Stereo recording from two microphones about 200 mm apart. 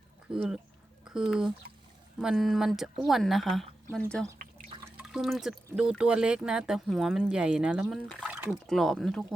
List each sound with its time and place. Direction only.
0.3 s speech: 5° right (ahead or behind)
4.9 s speech: 5° right (ahead or behind)